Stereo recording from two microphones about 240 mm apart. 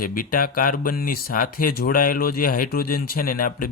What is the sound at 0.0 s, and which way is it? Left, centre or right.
Speech, left.